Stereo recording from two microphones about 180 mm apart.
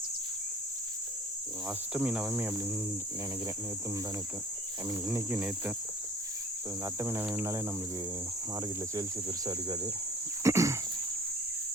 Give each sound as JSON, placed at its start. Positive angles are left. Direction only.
{"t": 1.9, "sound": "speech", "side_deg": -5}
{"t": 4.9, "sound": "speech", "side_deg": -15}
{"t": 6.8, "sound": "speech", "side_deg": -15}
{"t": 9.5, "sound": "speech", "side_deg": -20}